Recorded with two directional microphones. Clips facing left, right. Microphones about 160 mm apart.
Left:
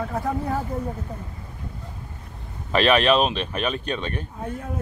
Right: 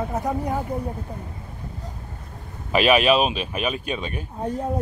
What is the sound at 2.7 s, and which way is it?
Speech, 10° right (ahead or behind).